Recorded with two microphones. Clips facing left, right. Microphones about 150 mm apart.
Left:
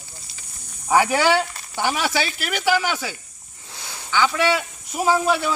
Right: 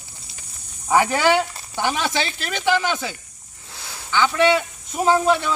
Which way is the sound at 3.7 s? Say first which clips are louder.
Even; centre (ahead or behind).